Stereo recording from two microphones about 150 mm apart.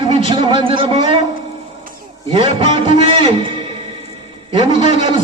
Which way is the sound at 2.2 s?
35° right (ahead or behind).